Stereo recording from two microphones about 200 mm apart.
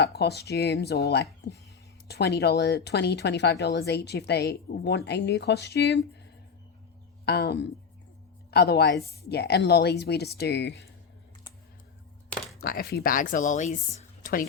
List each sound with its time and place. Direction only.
0.0 s speech: 55° left (ahead or behind)
7.3 s a woman's voice: 55° left (ahead or behind)
12.5 s speech: 50° left (ahead or behind)